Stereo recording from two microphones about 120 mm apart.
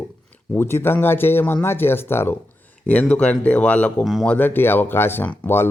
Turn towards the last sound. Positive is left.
turn(degrees=20)  # may be behind; listen again after turning